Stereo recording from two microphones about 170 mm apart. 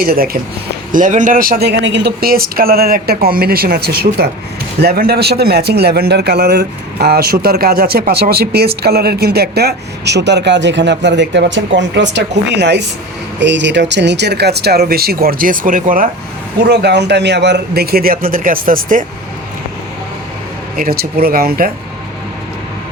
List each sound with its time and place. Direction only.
0.0 s speech: 60° right (ahead or behind)
0.9 s speech: 50° right (ahead or behind)
16.6 s speech: 75° right (ahead or behind); by 19.0 s 55° right (ahead or behind)
20.7 s speech: 60° right (ahead or behind)